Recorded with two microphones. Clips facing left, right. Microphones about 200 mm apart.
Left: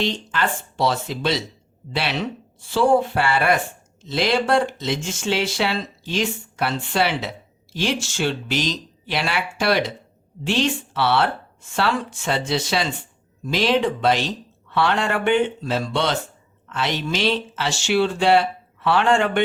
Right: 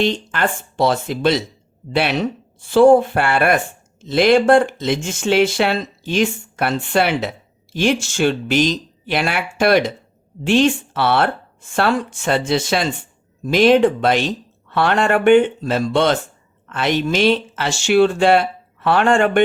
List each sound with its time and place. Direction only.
0.0 s speech: 50° right (ahead or behind)